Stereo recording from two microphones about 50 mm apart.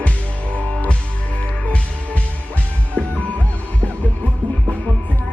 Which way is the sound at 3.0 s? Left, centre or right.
Left.